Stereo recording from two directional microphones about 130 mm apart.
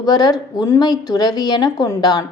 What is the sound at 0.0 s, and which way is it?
A woman's voice, 30° left (ahead or behind).